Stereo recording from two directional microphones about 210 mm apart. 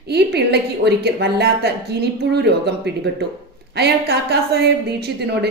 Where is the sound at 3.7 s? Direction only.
50° right (ahead or behind).